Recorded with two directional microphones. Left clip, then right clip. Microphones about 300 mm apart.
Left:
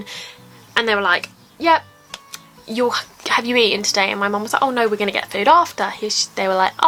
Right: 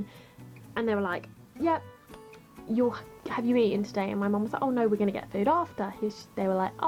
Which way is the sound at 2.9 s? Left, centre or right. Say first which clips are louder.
Left 16 dB; centre.